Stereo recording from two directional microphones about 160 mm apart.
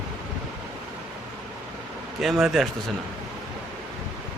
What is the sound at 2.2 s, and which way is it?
Speech, centre (ahead or behind).